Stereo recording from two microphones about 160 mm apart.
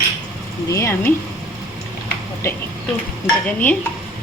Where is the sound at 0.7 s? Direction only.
15° left (ahead or behind).